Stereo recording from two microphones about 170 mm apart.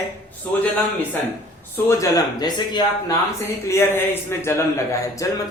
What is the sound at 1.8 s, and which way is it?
Speech, 20° left (ahead or behind).